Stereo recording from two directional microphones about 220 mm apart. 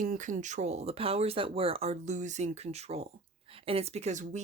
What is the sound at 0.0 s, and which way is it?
Speech, 35° right (ahead or behind).